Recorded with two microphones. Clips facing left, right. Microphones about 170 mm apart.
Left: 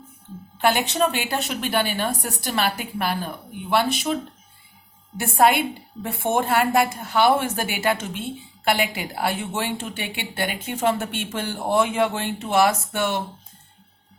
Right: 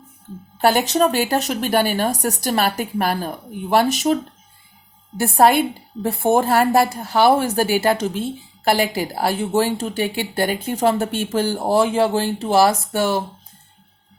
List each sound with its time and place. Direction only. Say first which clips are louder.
0.6 s a woman's voice: right 4 dB; 40° right (ahead or behind)